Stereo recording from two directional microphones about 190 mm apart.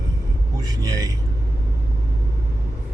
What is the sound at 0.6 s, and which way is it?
Speech, 20° right (ahead or behind).